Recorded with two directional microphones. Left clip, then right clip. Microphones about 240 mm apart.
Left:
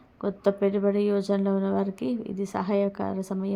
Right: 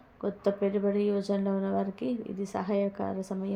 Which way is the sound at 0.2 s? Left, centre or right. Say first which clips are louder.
Left 4 dB; left.